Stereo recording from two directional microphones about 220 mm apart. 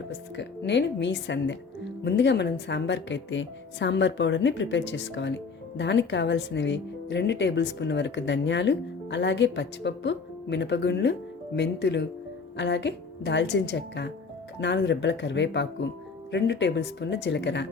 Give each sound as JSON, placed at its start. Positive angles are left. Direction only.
{"t": 0.3, "sound": "a woman's voice", "side_deg": 50}